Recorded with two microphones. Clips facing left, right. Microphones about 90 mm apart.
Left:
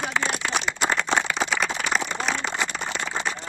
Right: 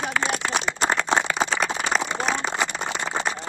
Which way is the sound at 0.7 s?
35° right (ahead or behind).